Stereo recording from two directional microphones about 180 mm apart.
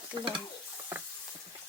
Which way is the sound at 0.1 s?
25° right (ahead or behind).